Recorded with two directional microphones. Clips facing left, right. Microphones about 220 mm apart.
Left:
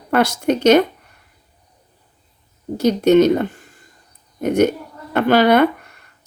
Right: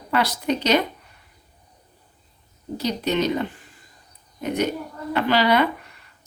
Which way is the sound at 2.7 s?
45° left (ahead or behind).